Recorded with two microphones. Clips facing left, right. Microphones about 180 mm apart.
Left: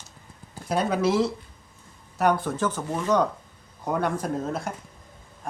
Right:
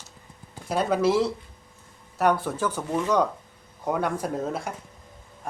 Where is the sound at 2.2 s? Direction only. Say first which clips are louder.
Even; 5° right (ahead or behind).